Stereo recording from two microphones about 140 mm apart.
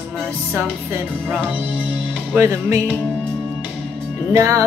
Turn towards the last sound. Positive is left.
turn(degrees=-20)  # may be behind; listen again after turning